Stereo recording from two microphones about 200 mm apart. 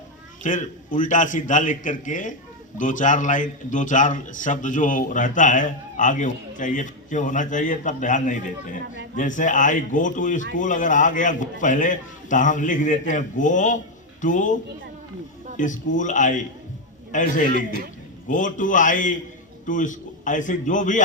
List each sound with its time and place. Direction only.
0.4 s a man's voice: 40° left (ahead or behind)